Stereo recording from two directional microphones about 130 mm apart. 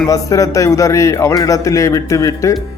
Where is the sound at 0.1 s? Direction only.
25° left (ahead or behind).